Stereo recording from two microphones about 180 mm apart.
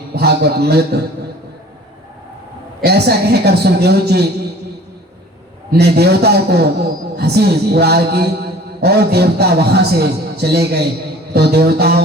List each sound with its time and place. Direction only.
0.1 s a man's voice: 65° right (ahead or behind)
2.8 s a man's voice: 65° right (ahead or behind)
5.7 s a man's voice: 65° right (ahead or behind)